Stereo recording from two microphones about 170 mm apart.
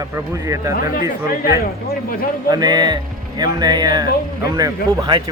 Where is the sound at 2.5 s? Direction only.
25° right (ahead or behind).